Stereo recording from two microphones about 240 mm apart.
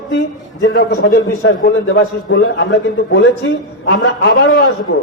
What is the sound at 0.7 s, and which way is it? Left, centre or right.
A man's voice, left.